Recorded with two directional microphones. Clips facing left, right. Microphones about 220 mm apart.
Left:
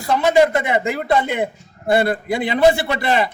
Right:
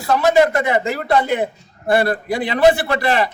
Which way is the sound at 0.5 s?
20° left (ahead or behind).